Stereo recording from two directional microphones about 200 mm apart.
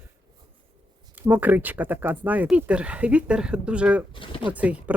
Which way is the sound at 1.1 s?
10° right (ahead or behind).